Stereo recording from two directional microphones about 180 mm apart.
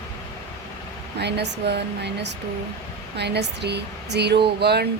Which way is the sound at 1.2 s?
70° right (ahead or behind).